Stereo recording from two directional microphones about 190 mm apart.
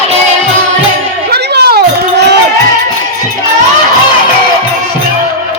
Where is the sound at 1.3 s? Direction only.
55° right (ahead or behind).